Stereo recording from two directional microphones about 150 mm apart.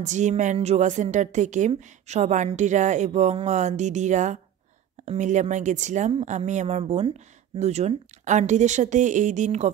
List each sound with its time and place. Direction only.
0.0 s speech: 50° right (ahead or behind)